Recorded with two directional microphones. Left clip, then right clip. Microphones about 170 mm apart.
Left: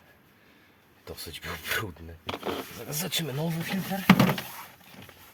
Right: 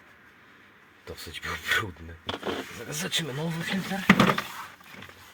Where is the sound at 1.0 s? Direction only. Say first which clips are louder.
Right 2 dB; 40° left (ahead or behind).